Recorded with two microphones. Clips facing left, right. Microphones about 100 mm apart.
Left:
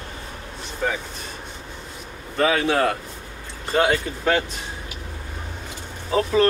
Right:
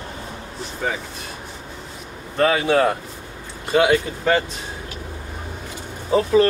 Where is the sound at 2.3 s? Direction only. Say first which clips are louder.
Right 2 dB; 5° right (ahead or behind).